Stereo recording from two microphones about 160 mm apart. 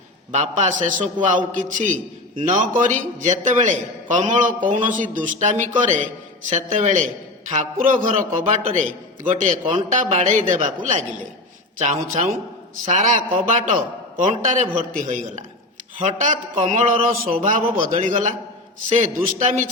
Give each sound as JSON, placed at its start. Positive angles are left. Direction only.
{"t": 0.3, "sound": "a man's voice", "side_deg": -45}